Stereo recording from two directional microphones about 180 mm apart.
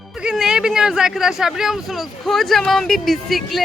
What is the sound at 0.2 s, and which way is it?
Speech, 5° right (ahead or behind).